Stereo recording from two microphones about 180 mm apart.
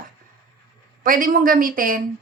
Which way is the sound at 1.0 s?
50° right (ahead or behind).